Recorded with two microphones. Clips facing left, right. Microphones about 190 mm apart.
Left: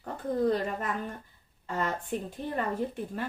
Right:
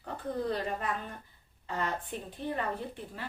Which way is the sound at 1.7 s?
45° left (ahead or behind).